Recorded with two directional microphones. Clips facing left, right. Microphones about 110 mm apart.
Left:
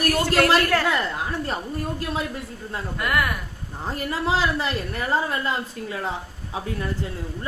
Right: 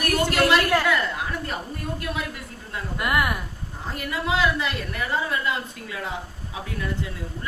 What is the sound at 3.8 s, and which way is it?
A woman's voice, 35° left (ahead or behind).